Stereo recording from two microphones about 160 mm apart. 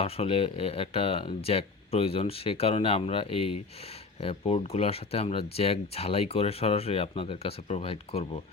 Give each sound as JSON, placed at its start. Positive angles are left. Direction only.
{"t": 0.0, "sound": "speech", "side_deg": 40}